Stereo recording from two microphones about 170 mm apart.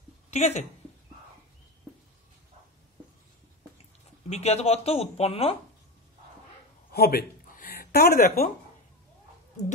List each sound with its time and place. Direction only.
0.3 s speech: 40° left (ahead or behind)
4.3 s speech: 40° left (ahead or behind)
6.9 s a sound: 65° left (ahead or behind)